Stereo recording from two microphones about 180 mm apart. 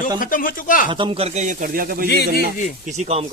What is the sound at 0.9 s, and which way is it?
Speech, 30° right (ahead or behind).